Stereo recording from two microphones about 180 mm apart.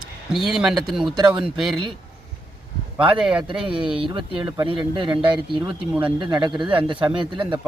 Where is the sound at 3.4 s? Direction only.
25° right (ahead or behind).